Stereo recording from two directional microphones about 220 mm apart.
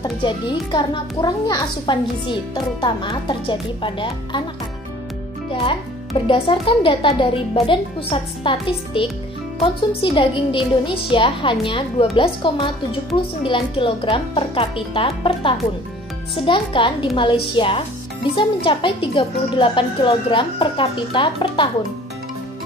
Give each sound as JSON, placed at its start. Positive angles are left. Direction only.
{"t": 0.0, "sound": "a woman's voice", "side_deg": 20}
{"t": 5.5, "sound": "a woman's voice", "side_deg": 25}